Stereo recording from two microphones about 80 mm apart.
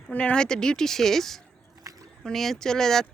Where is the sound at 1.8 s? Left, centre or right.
Right.